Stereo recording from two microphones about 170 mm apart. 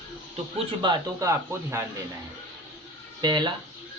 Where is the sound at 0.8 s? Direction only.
25° right (ahead or behind).